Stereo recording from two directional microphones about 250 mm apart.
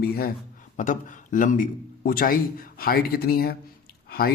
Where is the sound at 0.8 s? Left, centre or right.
Left.